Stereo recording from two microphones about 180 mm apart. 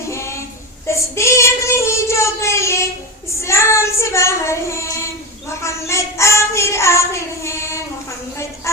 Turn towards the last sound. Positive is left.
turn(degrees=15)  # may be behind; listen again after turning